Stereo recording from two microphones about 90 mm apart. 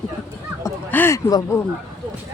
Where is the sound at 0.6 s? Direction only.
35° left (ahead or behind).